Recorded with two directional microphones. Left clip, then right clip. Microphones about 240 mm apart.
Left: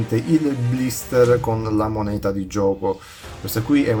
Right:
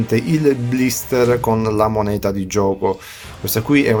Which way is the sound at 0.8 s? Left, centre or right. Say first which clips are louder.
Even; right.